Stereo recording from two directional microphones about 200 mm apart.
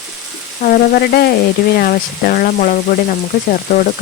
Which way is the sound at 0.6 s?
45° left (ahead or behind).